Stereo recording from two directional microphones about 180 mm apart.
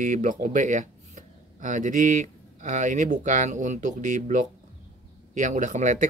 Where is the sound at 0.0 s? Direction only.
45° right (ahead or behind).